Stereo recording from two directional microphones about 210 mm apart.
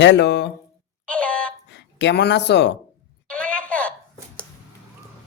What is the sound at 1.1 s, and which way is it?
Dog, 5° left (ahead or behind).